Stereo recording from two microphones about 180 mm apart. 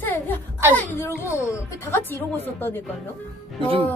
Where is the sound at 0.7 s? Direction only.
10° left (ahead or behind).